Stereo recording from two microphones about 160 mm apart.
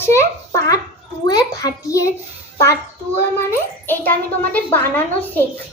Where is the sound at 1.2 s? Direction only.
20° left (ahead or behind).